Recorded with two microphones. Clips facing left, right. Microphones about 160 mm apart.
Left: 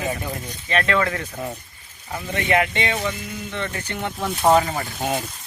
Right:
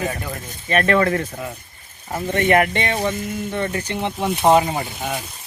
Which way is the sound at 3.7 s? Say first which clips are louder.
Right 4 dB; 25° right (ahead or behind).